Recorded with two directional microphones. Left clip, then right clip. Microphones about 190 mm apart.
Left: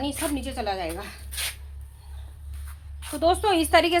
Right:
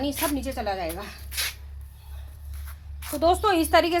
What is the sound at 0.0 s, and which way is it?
A woman's voice, 30° right (ahead or behind).